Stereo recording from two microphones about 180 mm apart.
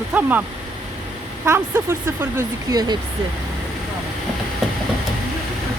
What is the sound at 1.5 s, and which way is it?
Speech, 15° right (ahead or behind).